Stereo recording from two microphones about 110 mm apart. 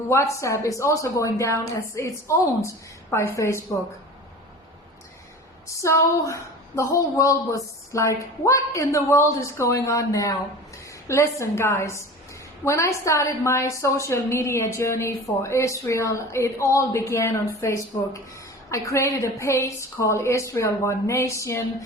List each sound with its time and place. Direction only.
0.1 s a woman's voice: 25° left (ahead or behind)
5.6 s a woman's voice: 25° left (ahead or behind)